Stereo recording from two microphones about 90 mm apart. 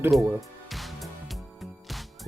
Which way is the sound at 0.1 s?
Centre (ahead or behind).